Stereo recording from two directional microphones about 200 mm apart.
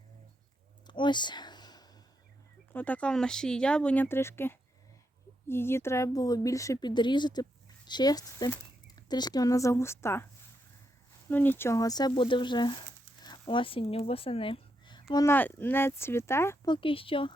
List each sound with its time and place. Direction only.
0.9 s a sound: 25° left (ahead or behind)
2.7 s speech: 5° left (ahead or behind)
11.3 s speech: 10° left (ahead or behind); by 15.0 s 25° left (ahead or behind)
15.1 s speech: 15° left (ahead or behind)
16.7 s speech: 25° left (ahead or behind)